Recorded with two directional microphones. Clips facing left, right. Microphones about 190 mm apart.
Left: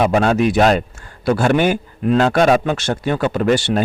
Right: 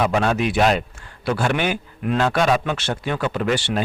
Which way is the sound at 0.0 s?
45° left (ahead or behind).